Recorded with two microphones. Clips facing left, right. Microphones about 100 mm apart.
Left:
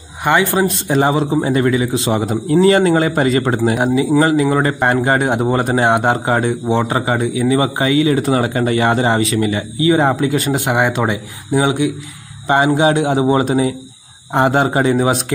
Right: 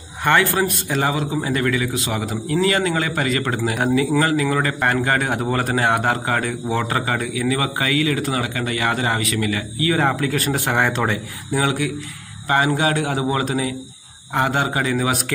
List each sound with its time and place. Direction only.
0.2 s a man's voice: 15° left (ahead or behind)